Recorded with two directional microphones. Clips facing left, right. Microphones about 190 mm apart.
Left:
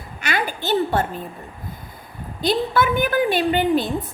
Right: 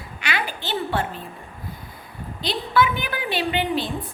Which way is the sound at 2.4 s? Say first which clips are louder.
Left 2 dB; 45° left (ahead or behind).